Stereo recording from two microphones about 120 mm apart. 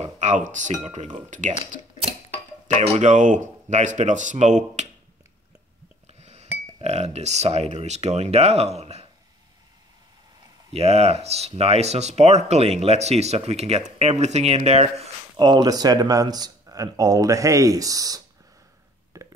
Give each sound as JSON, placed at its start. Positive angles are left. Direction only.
{"t": 0.0, "sound": "speech", "side_deg": -75}
{"t": 2.8, "sound": "speech", "side_deg": -70}
{"t": 6.0, "sound": "speech", "side_deg": -65}
{"t": 10.7, "sound": "speech", "side_deg": -60}
{"t": 15.3, "sound": "speech", "side_deg": -35}
{"t": 19.1, "sound": "a sound", "side_deg": -25}